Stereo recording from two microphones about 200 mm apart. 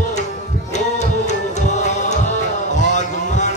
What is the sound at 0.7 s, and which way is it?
Music, 35° left (ahead or behind).